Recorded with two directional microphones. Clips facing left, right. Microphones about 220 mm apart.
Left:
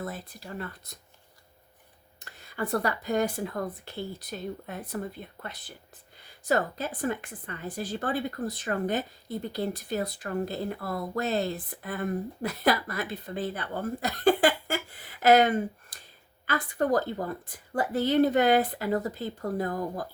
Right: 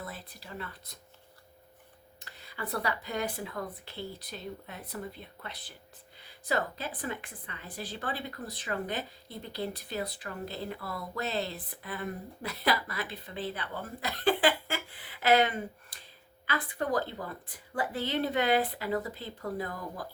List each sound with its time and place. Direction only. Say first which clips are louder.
0.0 s speech: left 6 dB; 45° left (ahead or behind)
2.1 s a woman's voice: left 8 dB; 45° left (ahead or behind)